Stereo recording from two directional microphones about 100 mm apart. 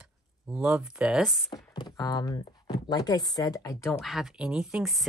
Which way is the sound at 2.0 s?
35° left (ahead or behind).